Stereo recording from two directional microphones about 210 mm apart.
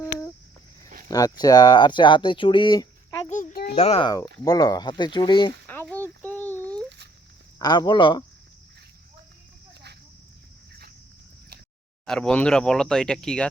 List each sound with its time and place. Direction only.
1.0 s speech: 20° left (ahead or behind)
3.2 s a sound: 35° left (ahead or behind)
3.8 s speech: 30° left (ahead or behind)
4.4 s speech: 15° left (ahead or behind)
5.9 s a sound: 5° left (ahead or behind)
7.6 s speech: 20° left (ahead or behind)
12.0 s speech: 5° left (ahead or behind)